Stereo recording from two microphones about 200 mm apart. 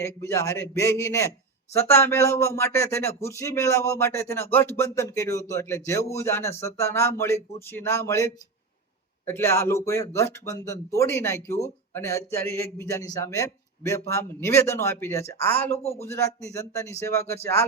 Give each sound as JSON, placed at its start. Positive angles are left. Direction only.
{"t": 0.0, "sound": "speech", "side_deg": 15}